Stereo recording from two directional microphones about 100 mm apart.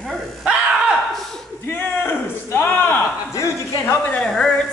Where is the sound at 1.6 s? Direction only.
25° left (ahead or behind).